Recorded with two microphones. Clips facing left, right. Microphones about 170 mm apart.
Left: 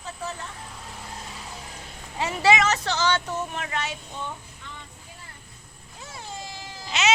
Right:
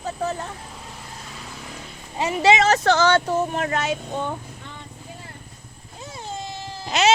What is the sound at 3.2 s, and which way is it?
Speech, 40° right (ahead or behind).